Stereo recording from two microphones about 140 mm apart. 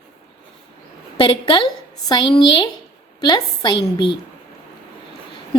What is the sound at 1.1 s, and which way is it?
A woman's voice, 40° left (ahead or behind).